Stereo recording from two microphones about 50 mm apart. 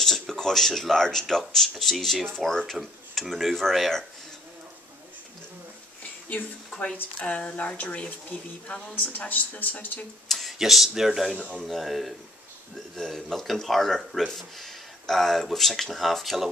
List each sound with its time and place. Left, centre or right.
0.0 s speech: centre
6.7 s a sound: centre
7.2 s speech: left
10.2 s speech: centre